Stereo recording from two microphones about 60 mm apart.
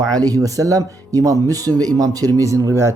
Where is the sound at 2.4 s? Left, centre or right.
Right.